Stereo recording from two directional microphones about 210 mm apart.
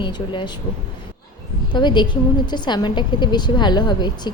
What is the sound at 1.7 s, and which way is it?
A woman's voice, 20° left (ahead or behind).